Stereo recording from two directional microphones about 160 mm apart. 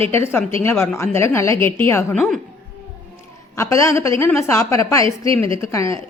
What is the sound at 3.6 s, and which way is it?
Speech, 20° left (ahead or behind).